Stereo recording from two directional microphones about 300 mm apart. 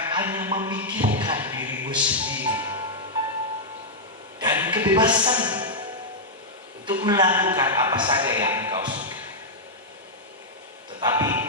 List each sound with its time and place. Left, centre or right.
0.1 s speech: centre
4.4 s a sound: centre
6.8 s a man's voice: centre
11.0 s music: centre